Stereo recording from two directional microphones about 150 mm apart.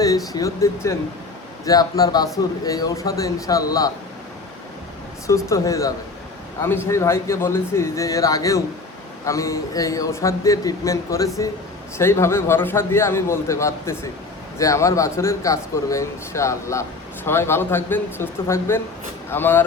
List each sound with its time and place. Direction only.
0.3 s speech: 20° left (ahead or behind)
5.3 s a man's voice: 20° left (ahead or behind)